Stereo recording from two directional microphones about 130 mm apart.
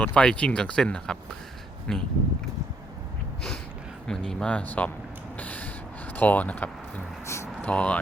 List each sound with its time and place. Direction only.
0.0 s speech: 10° left (ahead or behind)
4.0 s speech: 5° left (ahead or behind)
5.4 s creak: 10° left (ahead or behind)
6.1 s speech: 15° left (ahead or behind)
7.3 s vehicle: 20° left (ahead or behind)
7.7 s speech: 10° left (ahead or behind)